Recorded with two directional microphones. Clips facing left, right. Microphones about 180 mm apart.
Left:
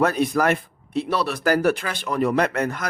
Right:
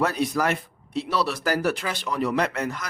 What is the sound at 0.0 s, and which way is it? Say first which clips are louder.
Speech: left 4 dB; 55° left (ahead or behind).